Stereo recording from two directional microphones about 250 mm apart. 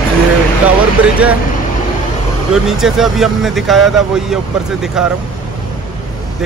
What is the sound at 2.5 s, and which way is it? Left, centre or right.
Speech, centre.